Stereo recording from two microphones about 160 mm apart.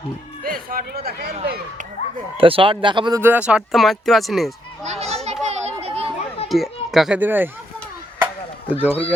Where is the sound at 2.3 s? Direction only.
35° right (ahead or behind).